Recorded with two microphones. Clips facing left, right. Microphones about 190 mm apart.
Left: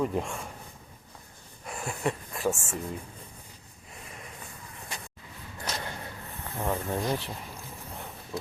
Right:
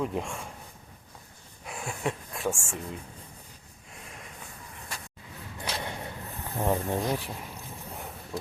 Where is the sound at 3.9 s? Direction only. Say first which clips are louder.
Left 1 dB; centre (ahead or behind).